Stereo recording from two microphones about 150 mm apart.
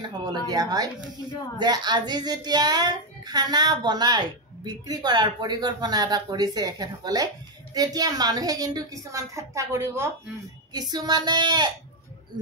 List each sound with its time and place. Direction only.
0.5 s a child's voice: 25° right (ahead or behind)